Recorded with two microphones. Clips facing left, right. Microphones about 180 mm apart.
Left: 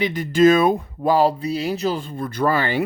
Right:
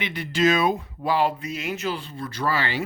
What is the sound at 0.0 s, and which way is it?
Speech, 45° left (ahead or behind).